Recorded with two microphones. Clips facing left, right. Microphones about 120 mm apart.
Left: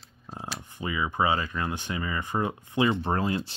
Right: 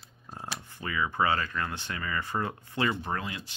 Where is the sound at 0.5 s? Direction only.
15° left (ahead or behind).